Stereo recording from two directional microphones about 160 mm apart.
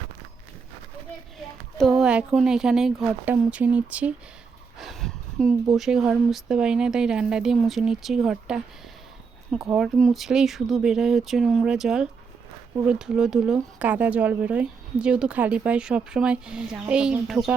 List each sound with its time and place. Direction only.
1.4 s speech: centre (ahead or behind)
4.8 s a sound: centre (ahead or behind)
5.7 s speech: 5° right (ahead or behind)
9.7 s a woman's voice: centre (ahead or behind)